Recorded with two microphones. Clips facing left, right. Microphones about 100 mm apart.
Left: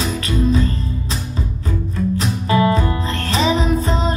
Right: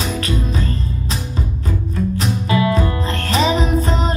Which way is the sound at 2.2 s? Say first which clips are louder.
Left 2 dB; 35° left (ahead or behind).